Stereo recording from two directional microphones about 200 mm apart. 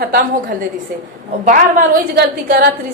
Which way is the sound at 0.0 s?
45° right (ahead or behind).